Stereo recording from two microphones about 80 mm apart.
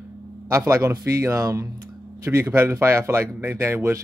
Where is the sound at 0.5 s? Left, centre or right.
Right.